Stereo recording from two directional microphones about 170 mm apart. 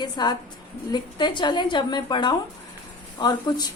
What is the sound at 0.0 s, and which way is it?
A woman's voice, 25° left (ahead or behind).